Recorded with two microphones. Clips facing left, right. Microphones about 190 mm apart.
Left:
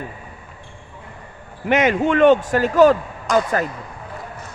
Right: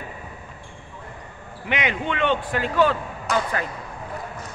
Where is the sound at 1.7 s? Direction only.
45° left (ahead or behind).